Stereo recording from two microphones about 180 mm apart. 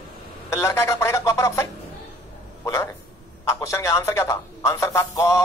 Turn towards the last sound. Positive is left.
turn(degrees=15)  # may be behind; listen again after turning